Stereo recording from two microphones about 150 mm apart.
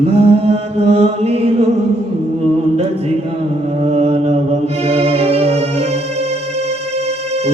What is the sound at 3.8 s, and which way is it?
Mantra, 45° right (ahead or behind).